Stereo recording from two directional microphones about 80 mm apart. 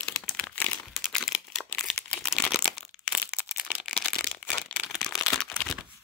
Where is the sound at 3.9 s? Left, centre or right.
Centre.